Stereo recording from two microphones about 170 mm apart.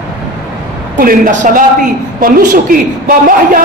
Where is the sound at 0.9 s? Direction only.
55° right (ahead or behind).